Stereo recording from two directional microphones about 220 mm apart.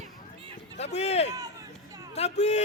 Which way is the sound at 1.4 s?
15° right (ahead or behind).